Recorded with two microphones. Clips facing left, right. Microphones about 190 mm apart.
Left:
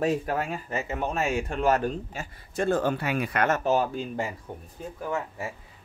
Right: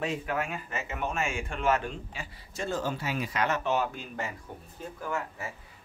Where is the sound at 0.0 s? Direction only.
40° left (ahead or behind).